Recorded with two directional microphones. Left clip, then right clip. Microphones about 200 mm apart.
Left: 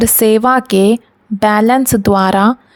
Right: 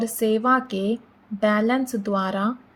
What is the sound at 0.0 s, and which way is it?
Speech, 55° left (ahead or behind).